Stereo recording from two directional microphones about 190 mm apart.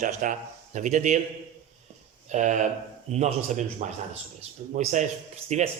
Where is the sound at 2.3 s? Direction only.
40° right (ahead or behind).